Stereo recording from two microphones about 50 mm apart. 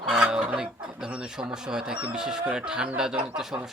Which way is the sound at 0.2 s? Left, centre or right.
Centre.